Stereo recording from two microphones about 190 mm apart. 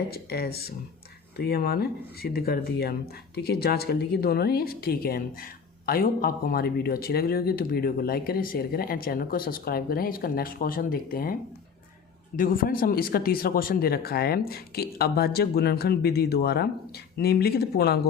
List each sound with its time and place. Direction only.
0.1 s speech: 55° left (ahead or behind)
12.4 s speech: 50° left (ahead or behind)